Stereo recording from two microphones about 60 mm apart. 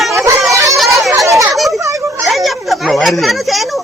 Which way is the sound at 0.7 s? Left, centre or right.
Centre.